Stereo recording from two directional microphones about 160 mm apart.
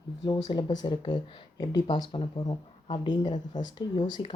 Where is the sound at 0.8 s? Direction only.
30° left (ahead or behind).